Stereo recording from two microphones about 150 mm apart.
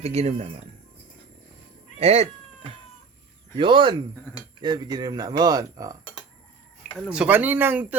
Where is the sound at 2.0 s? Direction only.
45° right (ahead or behind).